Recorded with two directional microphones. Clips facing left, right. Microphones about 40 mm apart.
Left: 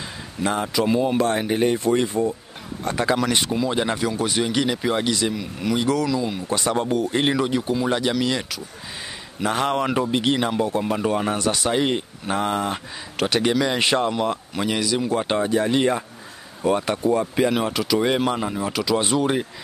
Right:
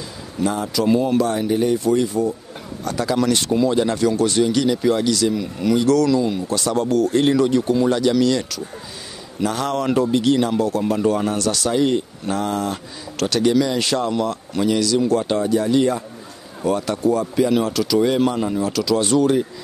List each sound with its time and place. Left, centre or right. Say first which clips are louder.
0.4 s speech: right 2 dB; left
0.8 s speech: right 4 dB; centre
1.2 s speech: right 1 dB; left
5.3 s speech: right 5 dB; centre
6.4 s speech: right 2 dB; left